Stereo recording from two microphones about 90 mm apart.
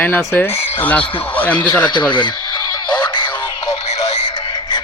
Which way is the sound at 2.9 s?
15° left (ahead or behind).